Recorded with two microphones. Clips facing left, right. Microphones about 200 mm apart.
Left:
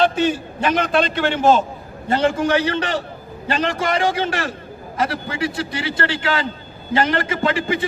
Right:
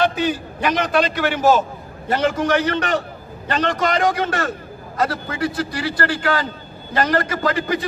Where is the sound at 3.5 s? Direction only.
30° left (ahead or behind).